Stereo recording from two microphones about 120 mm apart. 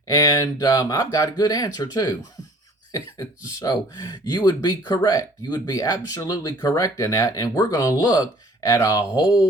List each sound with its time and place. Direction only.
0.1 s speech: 30° left (ahead or behind)